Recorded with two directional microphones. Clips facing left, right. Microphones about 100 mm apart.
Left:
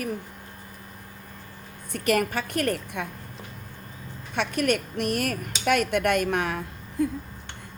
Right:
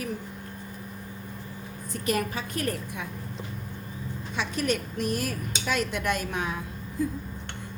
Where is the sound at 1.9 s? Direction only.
65° left (ahead or behind).